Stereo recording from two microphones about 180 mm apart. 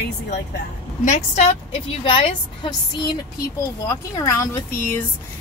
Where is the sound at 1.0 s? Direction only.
40° left (ahead or behind).